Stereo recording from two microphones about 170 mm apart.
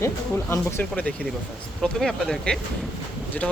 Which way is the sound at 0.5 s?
10° left (ahead or behind).